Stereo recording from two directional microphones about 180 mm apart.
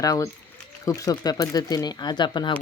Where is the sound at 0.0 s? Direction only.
20° left (ahead or behind).